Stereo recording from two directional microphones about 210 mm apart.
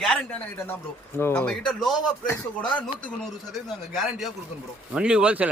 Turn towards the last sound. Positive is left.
turn(degrees=-5)  # may be behind; listen again after turning